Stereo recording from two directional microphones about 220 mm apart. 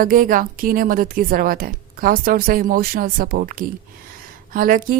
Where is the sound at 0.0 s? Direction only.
40° right (ahead or behind).